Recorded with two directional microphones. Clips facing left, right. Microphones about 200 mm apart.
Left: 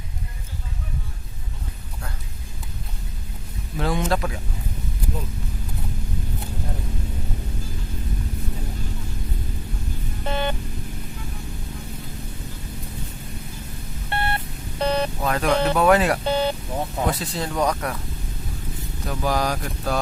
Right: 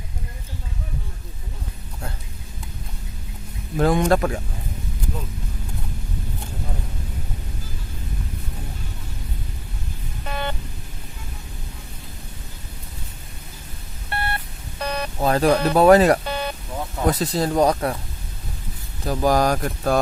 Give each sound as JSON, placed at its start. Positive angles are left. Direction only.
{"t": 3.8, "sound": "speech", "side_deg": -50}
{"t": 10.2, "sound": "music", "side_deg": 25}
{"t": 14.1, "sound": "telephone dialing", "side_deg": 25}
{"t": 15.2, "sound": "speech", "side_deg": -35}
{"t": 16.2, "sound": "music", "side_deg": 25}
{"t": 17.1, "sound": "speech", "side_deg": -40}
{"t": 19.0, "sound": "speech", "side_deg": -45}